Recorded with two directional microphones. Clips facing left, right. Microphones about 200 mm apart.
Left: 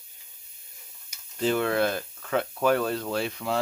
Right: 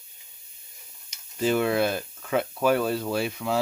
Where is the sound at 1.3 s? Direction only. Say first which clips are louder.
Right 1 dB; 10° right (ahead or behind).